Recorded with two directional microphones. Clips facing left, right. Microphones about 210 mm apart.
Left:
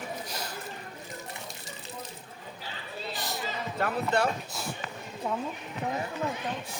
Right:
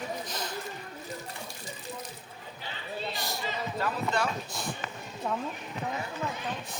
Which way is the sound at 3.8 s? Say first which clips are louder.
Left 4 dB; 60° left (ahead or behind).